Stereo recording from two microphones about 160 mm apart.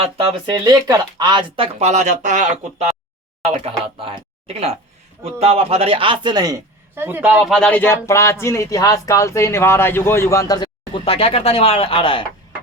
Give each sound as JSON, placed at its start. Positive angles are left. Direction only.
{"t": 0.0, "sound": "speech", "side_deg": -35}
{"t": 3.5, "sound": "speech", "side_deg": -35}